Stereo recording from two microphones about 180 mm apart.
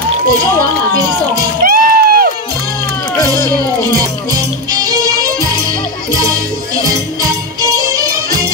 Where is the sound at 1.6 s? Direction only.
55° right (ahead or behind).